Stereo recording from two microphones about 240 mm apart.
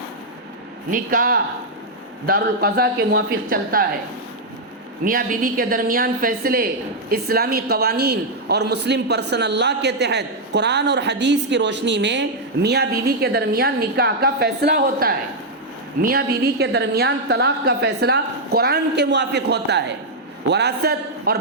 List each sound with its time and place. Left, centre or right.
0.9 s a woman's voice: right
5.0 s a woman's voice: right